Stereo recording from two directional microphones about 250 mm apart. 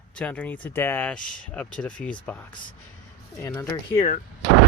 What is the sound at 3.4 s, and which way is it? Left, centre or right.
Speech, centre.